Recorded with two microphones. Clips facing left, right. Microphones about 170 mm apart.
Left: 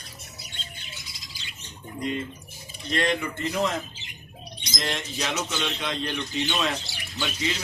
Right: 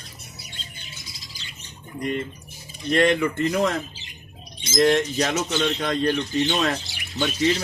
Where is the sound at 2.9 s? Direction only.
50° right (ahead or behind).